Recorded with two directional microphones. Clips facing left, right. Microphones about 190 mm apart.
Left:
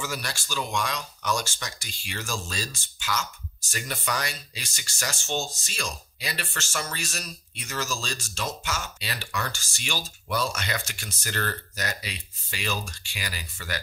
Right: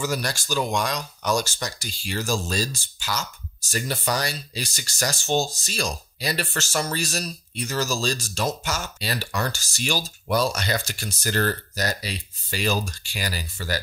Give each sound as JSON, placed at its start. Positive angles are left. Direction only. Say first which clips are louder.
{"t": 0.0, "sound": "speech", "louder": "right 7 dB", "side_deg": -40}